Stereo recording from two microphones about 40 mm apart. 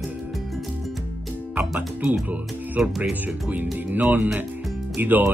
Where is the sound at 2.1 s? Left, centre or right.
Right.